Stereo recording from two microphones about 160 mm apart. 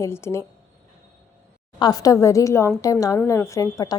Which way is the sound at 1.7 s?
25° left (ahead or behind).